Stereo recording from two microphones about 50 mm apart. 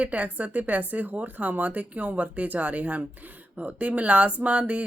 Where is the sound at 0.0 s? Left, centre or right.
Right.